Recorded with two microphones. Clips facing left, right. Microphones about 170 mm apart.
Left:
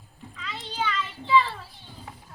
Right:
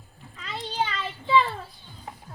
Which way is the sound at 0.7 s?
35° right (ahead or behind).